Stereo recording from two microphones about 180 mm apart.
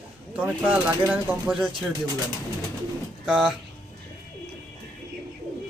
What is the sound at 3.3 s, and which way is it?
Speech, 5° right (ahead or behind).